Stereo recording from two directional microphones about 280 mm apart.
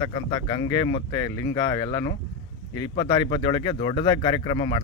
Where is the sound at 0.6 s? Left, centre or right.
Centre.